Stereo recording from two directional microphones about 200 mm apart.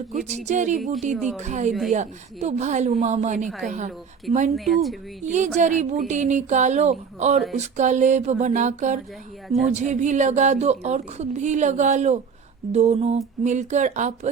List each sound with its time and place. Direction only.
0.3 s speech: 35° right (ahead or behind)
4.5 s speech: centre (ahead or behind)
5.2 s speech: 35° right (ahead or behind)